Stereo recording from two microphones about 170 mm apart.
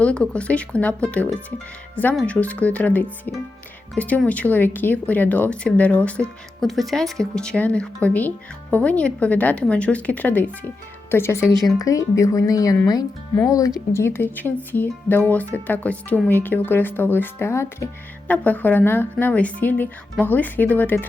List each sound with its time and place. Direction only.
0.0 s speech: 5° left (ahead or behind)